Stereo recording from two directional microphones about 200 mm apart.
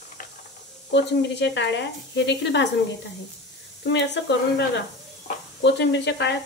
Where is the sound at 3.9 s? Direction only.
60° left (ahead or behind).